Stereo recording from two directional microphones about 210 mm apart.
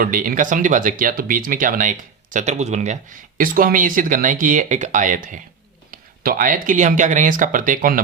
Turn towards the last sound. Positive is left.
turn(degrees=-40)  # may be behind; listen again after turning